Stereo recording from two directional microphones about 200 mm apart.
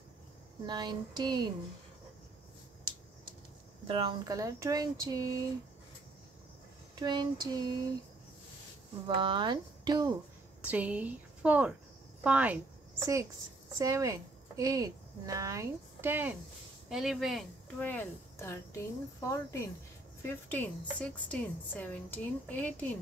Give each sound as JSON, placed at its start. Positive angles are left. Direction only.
{"t": 0.7, "sound": "speech", "side_deg": -20}
{"t": 3.8, "sound": "speech", "side_deg": -25}
{"t": 7.0, "sound": "speech", "side_deg": -20}
{"t": 9.0, "sound": "speech", "side_deg": -25}
{"t": 10.6, "sound": "a woman's voice", "side_deg": -5}